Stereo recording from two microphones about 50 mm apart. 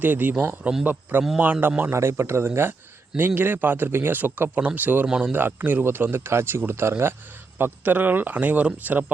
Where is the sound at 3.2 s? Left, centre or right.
Right.